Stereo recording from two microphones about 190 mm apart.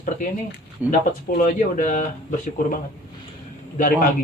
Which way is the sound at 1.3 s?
50° left (ahead or behind).